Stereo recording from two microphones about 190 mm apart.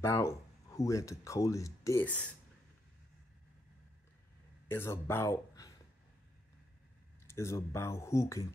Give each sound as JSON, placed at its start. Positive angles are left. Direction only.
{"t": 0.0, "sound": "speech", "side_deg": 15}
{"t": 4.6, "sound": "speech", "side_deg": 10}
{"t": 7.2, "sound": "speech", "side_deg": 15}